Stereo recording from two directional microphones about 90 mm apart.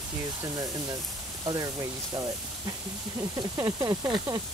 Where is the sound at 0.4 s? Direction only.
45° right (ahead or behind).